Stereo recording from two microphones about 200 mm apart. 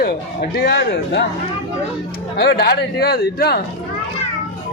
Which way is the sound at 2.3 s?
55° left (ahead or behind).